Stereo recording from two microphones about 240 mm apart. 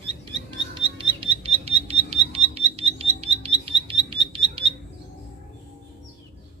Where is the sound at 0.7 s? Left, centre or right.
Right.